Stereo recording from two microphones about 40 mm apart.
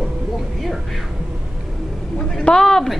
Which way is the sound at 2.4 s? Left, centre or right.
Centre.